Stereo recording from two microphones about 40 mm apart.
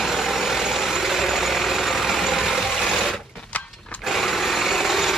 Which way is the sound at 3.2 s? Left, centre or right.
Left.